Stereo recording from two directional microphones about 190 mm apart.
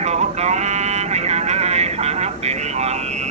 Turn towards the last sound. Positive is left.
turn(degrees=-35)  # may be behind; listen again after turning